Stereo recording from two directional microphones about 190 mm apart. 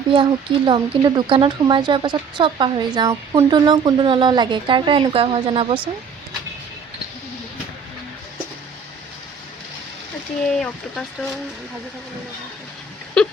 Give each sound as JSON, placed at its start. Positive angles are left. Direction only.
{"t": 0.1, "sound": "speech", "side_deg": -25}
{"t": 10.6, "sound": "speech", "side_deg": 5}
{"t": 13.2, "sound": "a sound", "side_deg": 5}